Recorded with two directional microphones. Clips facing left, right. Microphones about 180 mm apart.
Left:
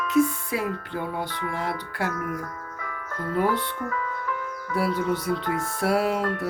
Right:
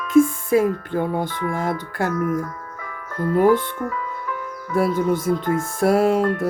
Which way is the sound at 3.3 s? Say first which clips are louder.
Right 8 dB; 45° right (ahead or behind).